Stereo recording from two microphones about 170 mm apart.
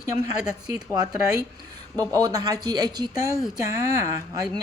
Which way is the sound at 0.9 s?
20° right (ahead or behind).